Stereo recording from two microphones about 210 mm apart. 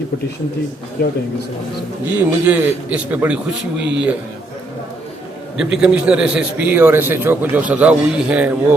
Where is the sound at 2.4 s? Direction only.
5° right (ahead or behind).